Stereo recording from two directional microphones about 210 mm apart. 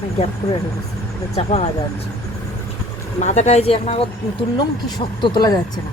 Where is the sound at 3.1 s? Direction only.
35° left (ahead or behind).